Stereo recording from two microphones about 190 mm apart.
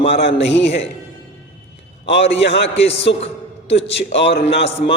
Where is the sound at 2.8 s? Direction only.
30° left (ahead or behind).